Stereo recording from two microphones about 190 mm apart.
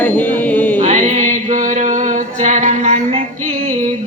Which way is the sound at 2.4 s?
40° right (ahead or behind).